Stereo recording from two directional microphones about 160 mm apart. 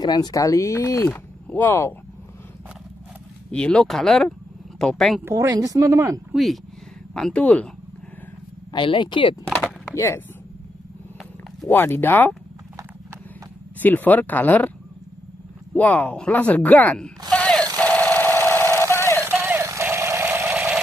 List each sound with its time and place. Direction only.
0.0 s speech: 25° left (ahead or behind)
3.5 s speech: 5° left (ahead or behind)
5.2 s speech: 20° right (ahead or behind)
6.3 s speech: centre (ahead or behind)
8.7 s speech: 30° left (ahead or behind)
9.7 s speech: 15° left (ahead or behind)
11.7 s speech: 15° left (ahead or behind)
13.7 s speech: 10° left (ahead or behind)
15.7 s speech: 10° left (ahead or behind)
17.3 s a sound: 5° left (ahead or behind)
19.2 s music: 15° right (ahead or behind)
20.5 s vehicle: 5° right (ahead or behind)